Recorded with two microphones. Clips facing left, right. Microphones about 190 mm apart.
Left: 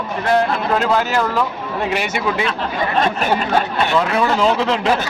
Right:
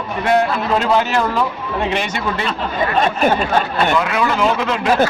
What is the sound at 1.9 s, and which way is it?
Speech, 10° left (ahead or behind).